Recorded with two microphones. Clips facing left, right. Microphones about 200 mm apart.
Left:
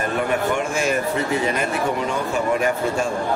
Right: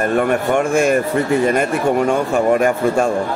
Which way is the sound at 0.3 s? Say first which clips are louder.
Right 6 dB; 50° right (ahead or behind).